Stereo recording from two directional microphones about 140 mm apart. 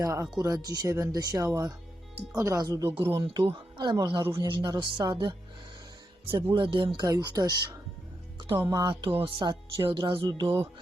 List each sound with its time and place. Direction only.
0.0 s speech: 25° right (ahead or behind)
6.3 s speech: 25° right (ahead or behind)
6.7 s speech: 35° right (ahead or behind)
7.0 s speech: 25° right (ahead or behind)